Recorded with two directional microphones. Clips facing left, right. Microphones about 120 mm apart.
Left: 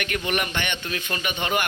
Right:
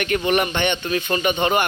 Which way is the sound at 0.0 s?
30° right (ahead or behind).